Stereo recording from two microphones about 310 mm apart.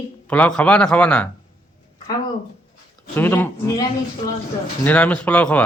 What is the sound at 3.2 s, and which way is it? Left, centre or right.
A man's voice, centre.